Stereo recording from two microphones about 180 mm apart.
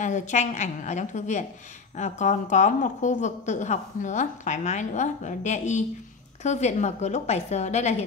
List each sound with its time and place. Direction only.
0.0 s a woman's voice: 40° left (ahead or behind)